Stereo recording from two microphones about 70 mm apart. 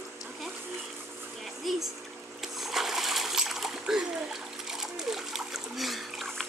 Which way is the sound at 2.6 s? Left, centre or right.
Centre.